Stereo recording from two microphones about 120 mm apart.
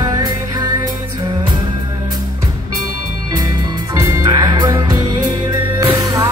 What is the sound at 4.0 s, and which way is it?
Music, 30° right (ahead or behind).